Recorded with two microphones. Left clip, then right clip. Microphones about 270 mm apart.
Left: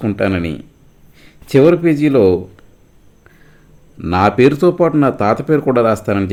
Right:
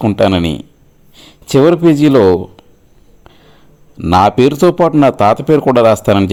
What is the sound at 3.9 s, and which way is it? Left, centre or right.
Speech, right.